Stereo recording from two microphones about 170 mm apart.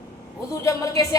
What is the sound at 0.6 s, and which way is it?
Speech, 20° left (ahead or behind).